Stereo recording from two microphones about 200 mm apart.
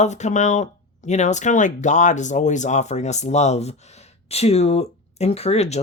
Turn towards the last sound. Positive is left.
turn(degrees=30)  # may be behind; listen again after turning